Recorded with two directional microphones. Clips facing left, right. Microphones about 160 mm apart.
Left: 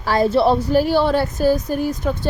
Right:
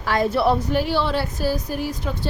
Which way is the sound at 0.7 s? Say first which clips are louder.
Left 6 dB; 45° left (ahead or behind).